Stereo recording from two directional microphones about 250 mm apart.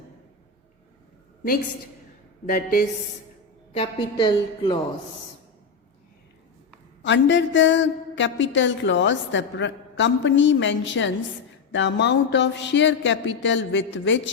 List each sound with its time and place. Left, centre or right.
2.5 s a woman's voice: left
3.7 s a woman's voice: left
7.0 s a woman's voice: left